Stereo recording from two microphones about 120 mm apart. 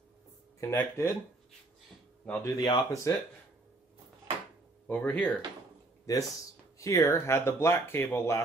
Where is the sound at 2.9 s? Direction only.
25° left (ahead or behind).